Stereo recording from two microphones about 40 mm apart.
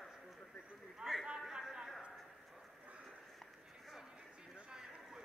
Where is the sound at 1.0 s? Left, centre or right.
Right.